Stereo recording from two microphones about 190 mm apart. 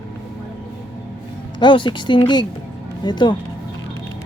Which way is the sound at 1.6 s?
25° left (ahead or behind).